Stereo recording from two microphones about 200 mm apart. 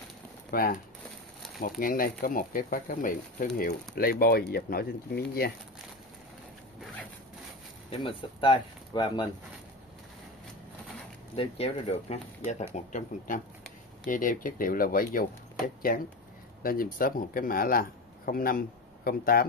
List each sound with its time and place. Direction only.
0.5 s speech: 45° left (ahead or behind)
8.0 s speech: 25° left (ahead or behind)
11.3 s speech: 30° left (ahead or behind); by 19.4 s 45° left (ahead or behind)